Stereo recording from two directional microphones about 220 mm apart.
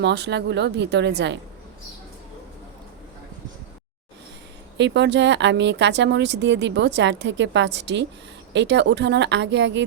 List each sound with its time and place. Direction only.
0.0 s speech: 50° right (ahead or behind)
4.8 s speech: 50° right (ahead or behind)